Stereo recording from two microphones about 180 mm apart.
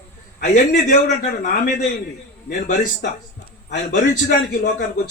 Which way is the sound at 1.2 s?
40° left (ahead or behind).